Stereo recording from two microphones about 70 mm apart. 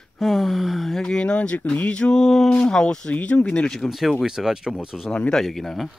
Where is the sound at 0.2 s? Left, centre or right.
Centre.